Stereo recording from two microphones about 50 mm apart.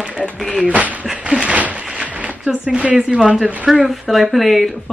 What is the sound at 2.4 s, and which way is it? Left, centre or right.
Speech, centre.